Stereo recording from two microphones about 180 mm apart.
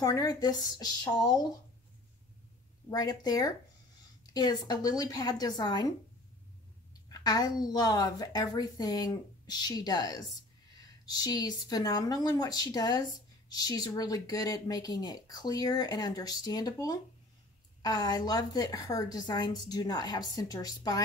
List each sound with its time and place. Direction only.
0.0 s speech: 20° left (ahead or behind)
2.9 s speech: 20° left (ahead or behind)
7.1 s speech: 20° left (ahead or behind)